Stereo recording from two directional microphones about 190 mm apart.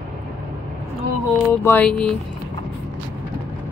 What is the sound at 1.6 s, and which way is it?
Music, 10° left (ahead or behind).